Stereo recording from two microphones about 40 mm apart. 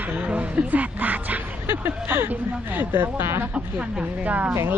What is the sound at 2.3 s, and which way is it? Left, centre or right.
Speech, right.